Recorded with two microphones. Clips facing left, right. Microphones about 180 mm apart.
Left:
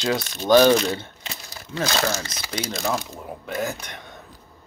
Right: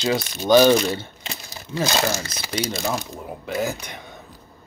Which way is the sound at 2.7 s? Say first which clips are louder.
Even; 5° right (ahead or behind).